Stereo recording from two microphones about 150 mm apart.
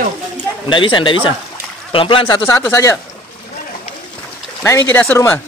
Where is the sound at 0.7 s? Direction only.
35° left (ahead or behind).